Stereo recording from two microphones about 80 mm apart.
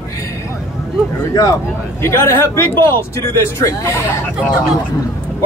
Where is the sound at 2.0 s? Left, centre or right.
Left.